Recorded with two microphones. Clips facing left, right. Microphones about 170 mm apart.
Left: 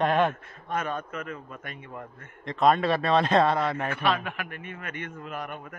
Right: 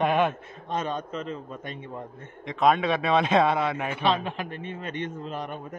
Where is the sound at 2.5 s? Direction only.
Centre (ahead or behind).